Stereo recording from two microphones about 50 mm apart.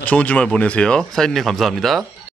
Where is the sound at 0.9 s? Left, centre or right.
Centre.